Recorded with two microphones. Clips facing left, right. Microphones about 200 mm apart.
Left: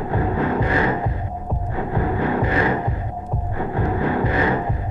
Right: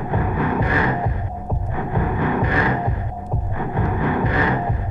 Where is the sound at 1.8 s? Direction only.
20° right (ahead or behind).